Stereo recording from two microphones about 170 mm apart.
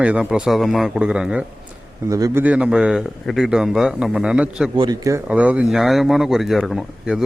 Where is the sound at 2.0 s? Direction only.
20° right (ahead or behind).